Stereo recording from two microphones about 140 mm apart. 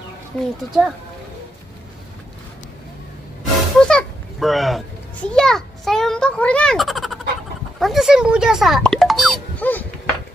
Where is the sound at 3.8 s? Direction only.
Centre (ahead or behind).